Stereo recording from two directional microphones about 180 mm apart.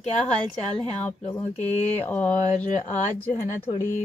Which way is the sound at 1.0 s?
35° left (ahead or behind).